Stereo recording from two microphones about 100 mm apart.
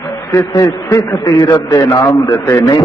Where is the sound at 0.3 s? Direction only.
30° left (ahead or behind).